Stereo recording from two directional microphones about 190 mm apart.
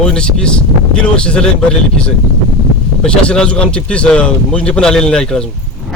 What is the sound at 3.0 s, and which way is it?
Speech, 5° left (ahead or behind).